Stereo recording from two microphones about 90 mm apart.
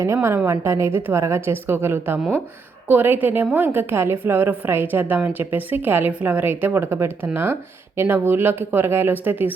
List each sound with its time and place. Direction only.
0.0 s a woman's voice: 30° right (ahead or behind)